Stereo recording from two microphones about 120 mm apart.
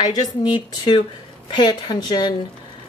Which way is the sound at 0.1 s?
40° left (ahead or behind).